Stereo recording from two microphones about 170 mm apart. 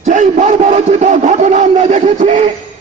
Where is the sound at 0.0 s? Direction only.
45° right (ahead or behind).